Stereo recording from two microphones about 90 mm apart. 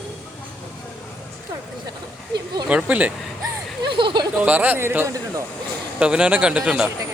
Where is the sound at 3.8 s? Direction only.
65° right (ahead or behind).